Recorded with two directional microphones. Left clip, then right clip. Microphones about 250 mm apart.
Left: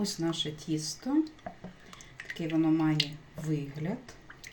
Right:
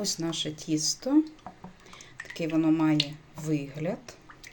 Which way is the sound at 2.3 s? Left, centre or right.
Right.